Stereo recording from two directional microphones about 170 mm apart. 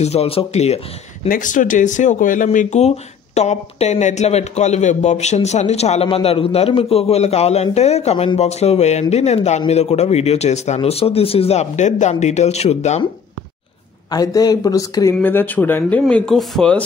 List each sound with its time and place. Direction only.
0.0 s a man's voice: 35° left (ahead or behind)
1.3 s a man's voice: 50° left (ahead or behind)
14.1 s speech: 20° left (ahead or behind); by 16.8 s 5° left (ahead or behind)